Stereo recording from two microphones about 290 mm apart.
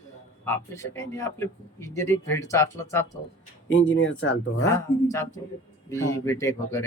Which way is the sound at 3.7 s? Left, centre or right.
Left.